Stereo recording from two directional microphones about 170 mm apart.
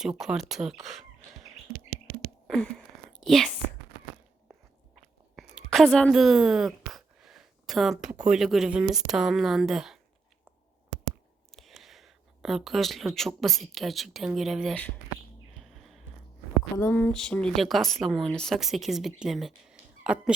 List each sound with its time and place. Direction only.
0.0 s speech: 5° right (ahead or behind)
1.7 s chirp: 65° right (ahead or behind)
2.5 s a sound: 5° left (ahead or behind)
4.9 s a sound: centre (ahead or behind)
8.2 s speech: 5° right (ahead or behind)
11.5 s speech: centre (ahead or behind)
15.6 s music: centre (ahead or behind)
16.7 s speech: 15° left (ahead or behind); by 20.3 s 5° right (ahead or behind)